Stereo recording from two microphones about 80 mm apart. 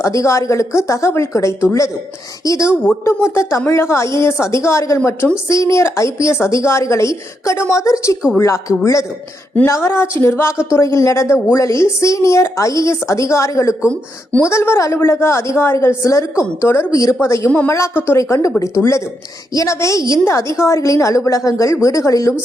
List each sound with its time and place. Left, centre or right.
0.0 s a woman's voice: left